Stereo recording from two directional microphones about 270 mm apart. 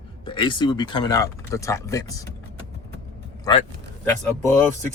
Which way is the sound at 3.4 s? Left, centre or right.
Centre.